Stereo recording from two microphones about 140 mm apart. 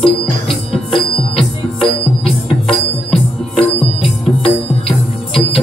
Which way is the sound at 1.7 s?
40° left (ahead or behind).